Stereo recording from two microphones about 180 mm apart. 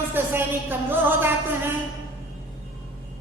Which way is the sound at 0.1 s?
10° right (ahead or behind).